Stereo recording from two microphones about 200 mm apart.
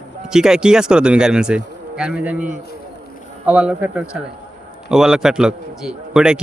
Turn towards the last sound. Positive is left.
turn(degrees=-5)  # may be behind; listen again after turning